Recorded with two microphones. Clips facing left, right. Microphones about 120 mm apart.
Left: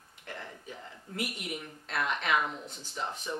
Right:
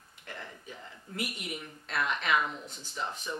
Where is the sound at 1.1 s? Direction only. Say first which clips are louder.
Left 1 dB; 55° left (ahead or behind).